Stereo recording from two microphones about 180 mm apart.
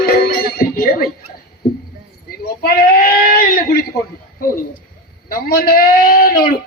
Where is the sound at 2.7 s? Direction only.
55° left (ahead or behind).